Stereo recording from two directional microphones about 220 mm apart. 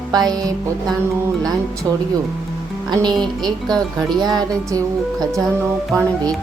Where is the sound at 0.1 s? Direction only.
20° right (ahead or behind).